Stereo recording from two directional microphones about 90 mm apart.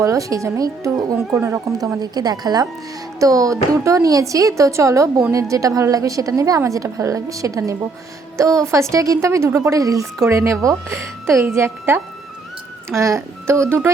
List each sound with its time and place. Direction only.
0.0 s speech: 40° right (ahead or behind)
13.0 s speech: 35° right (ahead or behind)